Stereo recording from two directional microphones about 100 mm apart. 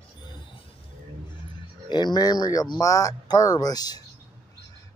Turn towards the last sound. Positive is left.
turn(degrees=40)  # may be behind; listen again after turning